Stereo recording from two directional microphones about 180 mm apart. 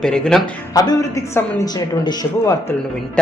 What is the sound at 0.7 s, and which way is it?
A man's voice, 20° left (ahead or behind).